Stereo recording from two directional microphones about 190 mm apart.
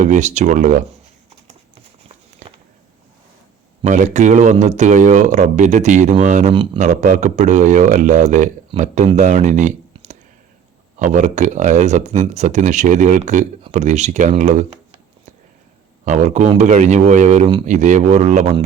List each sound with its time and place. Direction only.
0.0 s a man's voice: 40° right (ahead or behind)
2.4 s a sound: 40° right (ahead or behind)
3.8 s a man's voice: 40° right (ahead or behind)
16.0 s a man's voice: 35° right (ahead or behind)